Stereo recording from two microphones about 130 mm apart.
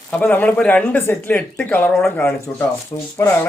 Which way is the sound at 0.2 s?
15° left (ahead or behind).